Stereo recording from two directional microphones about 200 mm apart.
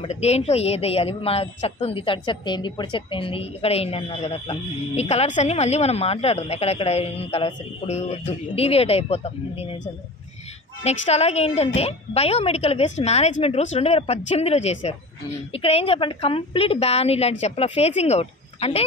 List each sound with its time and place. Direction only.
0.0 s a woman's voice: 35° left (ahead or behind)
10.8 s a woman's voice: 30° left (ahead or behind)